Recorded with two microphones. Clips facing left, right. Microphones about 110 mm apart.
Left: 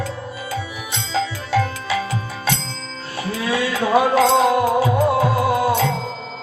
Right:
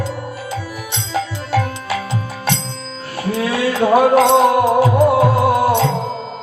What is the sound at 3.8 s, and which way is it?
Music, 55° right (ahead or behind).